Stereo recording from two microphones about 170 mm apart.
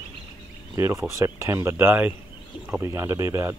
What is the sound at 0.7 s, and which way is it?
Speech, 15° right (ahead or behind).